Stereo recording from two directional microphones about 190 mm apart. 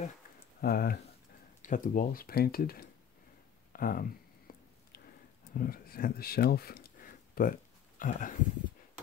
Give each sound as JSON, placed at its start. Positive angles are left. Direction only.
{"t": 0.6, "sound": "speech", "side_deg": 55}
{"t": 4.5, "sound": "a sound", "side_deg": 50}
{"t": 5.5, "sound": "speech", "side_deg": 50}